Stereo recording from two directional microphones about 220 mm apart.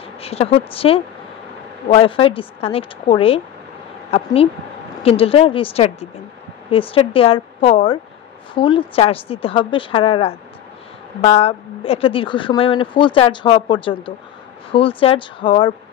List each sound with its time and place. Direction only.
0.2 s a woman's voice: 25° left (ahead or behind)